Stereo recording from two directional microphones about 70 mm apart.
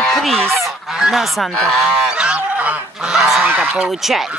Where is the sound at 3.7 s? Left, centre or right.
Centre.